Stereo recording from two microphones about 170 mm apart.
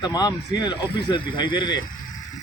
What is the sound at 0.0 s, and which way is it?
A man's voice, 25° left (ahead or behind).